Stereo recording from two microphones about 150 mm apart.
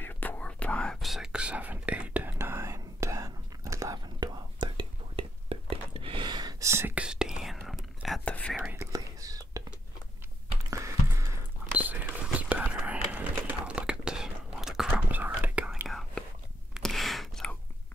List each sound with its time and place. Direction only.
0.0 s whispering: 10° left (ahead or behind); by 7.1 s 15° right (ahead or behind)
7.1 s whispering: 5° right (ahead or behind)
8.5 s whispering: 10° right (ahead or behind)
8.9 s whispering: 25° right (ahead or behind)
10.7 s a sound: 20° right (ahead or behind); by 14.9 s 5° right (ahead or behind)
14.9 s whispering: 10° right (ahead or behind)
16.7 s a sound: centre (ahead or behind)